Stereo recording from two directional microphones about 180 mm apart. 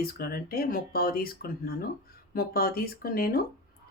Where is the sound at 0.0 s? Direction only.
55° left (ahead or behind).